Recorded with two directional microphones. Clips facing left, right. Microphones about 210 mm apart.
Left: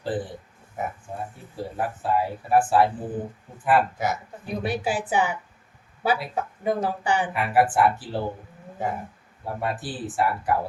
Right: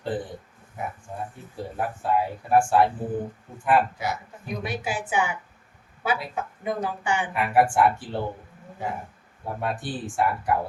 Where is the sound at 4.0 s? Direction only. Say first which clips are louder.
Left 3 dB; 45° left (ahead or behind).